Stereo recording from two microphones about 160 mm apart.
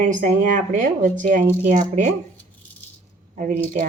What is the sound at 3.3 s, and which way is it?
Speech, 50° right (ahead or behind).